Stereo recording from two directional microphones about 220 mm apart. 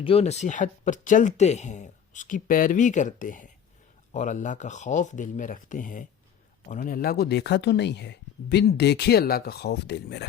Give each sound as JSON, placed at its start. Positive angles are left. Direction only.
{"t": 0.0, "sound": "speech", "side_deg": 25}